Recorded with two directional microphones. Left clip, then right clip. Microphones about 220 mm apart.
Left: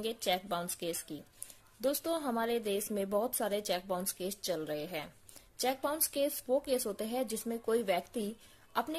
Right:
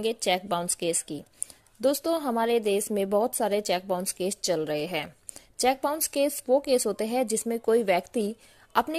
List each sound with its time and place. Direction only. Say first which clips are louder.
0.0 s speech: right 8 dB; 30° right (ahead or behind)